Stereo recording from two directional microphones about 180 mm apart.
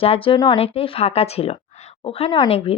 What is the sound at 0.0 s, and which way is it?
Speech, 30° left (ahead or behind).